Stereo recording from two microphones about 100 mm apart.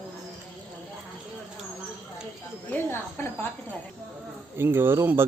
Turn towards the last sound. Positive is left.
turn(degrees=-25)  # may be behind; listen again after turning